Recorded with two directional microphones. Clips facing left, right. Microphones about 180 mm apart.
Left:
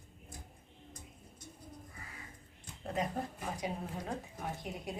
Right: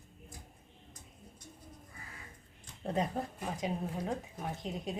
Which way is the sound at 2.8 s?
30° right (ahead or behind).